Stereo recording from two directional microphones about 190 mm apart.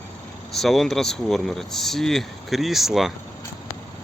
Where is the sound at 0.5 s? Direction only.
Centre (ahead or behind).